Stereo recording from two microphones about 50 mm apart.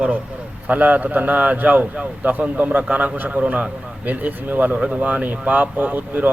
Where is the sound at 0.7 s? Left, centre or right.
Right.